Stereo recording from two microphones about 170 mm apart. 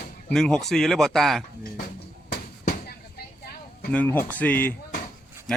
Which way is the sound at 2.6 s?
65° left (ahead or behind).